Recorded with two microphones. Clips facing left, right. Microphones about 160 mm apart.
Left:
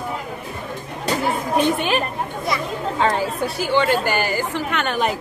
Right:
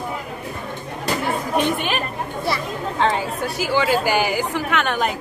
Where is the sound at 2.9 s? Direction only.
Centre (ahead or behind).